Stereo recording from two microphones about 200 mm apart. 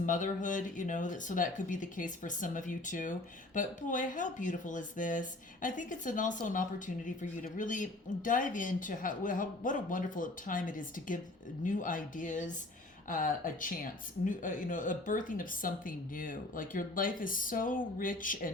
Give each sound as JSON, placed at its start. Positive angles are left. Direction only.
{"t": 0.0, "sound": "speech", "side_deg": 40}